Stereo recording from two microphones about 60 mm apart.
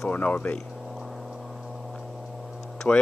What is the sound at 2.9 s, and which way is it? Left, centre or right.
Speech, left.